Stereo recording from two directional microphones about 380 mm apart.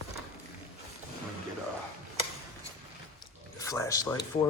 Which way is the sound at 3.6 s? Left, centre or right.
Centre.